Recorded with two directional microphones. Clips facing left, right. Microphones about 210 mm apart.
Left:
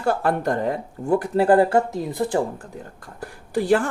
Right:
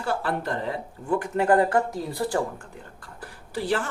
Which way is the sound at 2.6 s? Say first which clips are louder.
Left 6 dB; 45° left (ahead or behind).